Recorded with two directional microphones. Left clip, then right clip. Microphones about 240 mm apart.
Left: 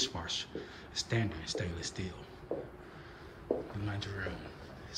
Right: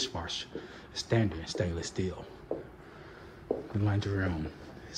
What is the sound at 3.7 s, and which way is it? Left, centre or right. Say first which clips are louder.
A man's voice: right 7 dB; centre.